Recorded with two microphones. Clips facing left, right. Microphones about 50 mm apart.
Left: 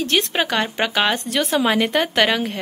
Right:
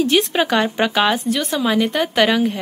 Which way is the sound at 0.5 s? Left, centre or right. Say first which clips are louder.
Right 4 dB; centre.